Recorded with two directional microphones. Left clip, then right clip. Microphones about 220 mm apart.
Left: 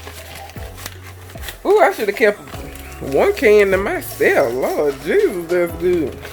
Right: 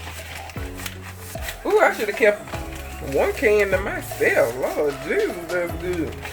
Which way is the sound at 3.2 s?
55° left (ahead or behind).